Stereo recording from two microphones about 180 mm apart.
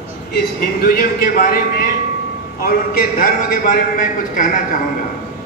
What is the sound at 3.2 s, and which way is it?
Speech, 45° left (ahead or behind).